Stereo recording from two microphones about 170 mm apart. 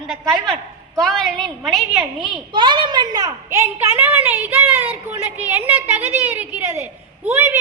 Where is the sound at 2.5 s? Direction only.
30° right (ahead or behind).